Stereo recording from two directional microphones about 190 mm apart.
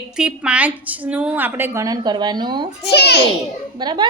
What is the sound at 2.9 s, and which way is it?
Speech, 60° left (ahead or behind).